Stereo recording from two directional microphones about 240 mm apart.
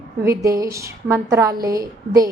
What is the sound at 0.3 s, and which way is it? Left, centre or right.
A woman's voice, centre.